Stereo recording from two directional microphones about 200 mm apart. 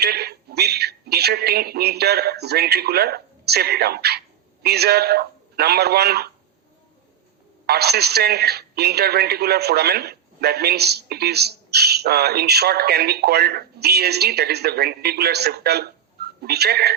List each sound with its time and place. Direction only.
0.0 s a man's voice: 55° right (ahead or behind)
7.7 s a man's voice: 55° right (ahead or behind)